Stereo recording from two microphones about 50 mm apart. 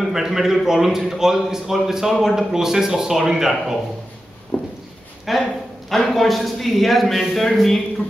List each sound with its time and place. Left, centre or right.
0.0 s a man's voice: centre
5.3 s a man's voice: centre